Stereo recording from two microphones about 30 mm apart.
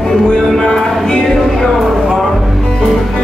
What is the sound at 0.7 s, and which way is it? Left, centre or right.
Music, centre.